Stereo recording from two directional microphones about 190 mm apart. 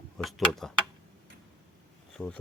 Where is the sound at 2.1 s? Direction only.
5° left (ahead or behind).